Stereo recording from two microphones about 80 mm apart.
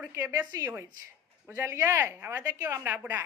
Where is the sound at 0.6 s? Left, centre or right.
Right.